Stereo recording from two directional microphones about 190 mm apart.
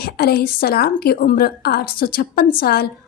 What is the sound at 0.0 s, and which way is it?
A woman's voice, 55° left (ahead or behind).